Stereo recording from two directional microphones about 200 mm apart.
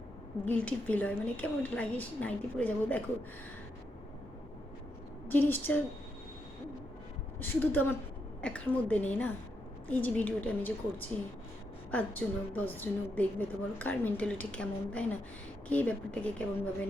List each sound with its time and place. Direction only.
0.4 s a woman's voice: 5° left (ahead or behind)
5.3 s a woman's voice: 10° left (ahead or behind)
7.3 s a woman's voice: 10° left (ahead or behind)